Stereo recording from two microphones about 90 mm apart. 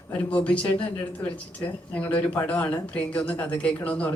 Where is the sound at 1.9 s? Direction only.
15° left (ahead or behind).